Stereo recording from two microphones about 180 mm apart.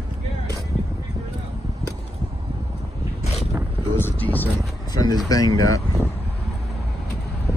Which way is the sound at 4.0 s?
10° left (ahead or behind).